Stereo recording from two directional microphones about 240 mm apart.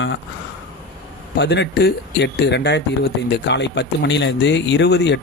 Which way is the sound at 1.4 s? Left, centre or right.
Left.